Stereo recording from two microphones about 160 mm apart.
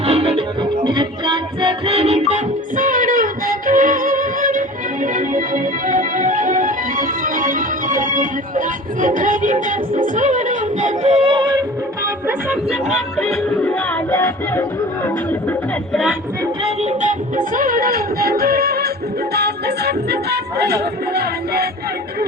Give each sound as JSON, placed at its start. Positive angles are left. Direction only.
{"t": 0.0, "sound": "music", "side_deg": -35}
{"t": 13.1, "sound": "music", "side_deg": 0}
{"t": 13.7, "sound": "music", "side_deg": 15}
{"t": 16.6, "sound": "music", "side_deg": -45}
{"t": 19.3, "sound": "music", "side_deg": -90}